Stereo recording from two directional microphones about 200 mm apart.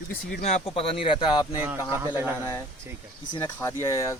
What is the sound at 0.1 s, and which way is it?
Speech, 40° left (ahead or behind).